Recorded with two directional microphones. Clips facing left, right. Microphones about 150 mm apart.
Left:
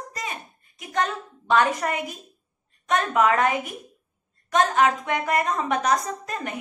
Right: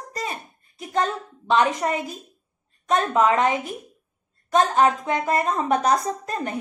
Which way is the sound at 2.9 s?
25° right (ahead or behind).